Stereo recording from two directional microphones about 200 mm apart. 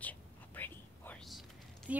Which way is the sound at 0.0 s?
10° left (ahead or behind).